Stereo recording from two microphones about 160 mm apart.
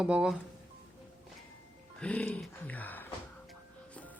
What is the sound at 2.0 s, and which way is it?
Speech, 10° left (ahead or behind).